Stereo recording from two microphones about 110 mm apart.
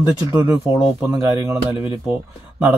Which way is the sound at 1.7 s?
50° left (ahead or behind).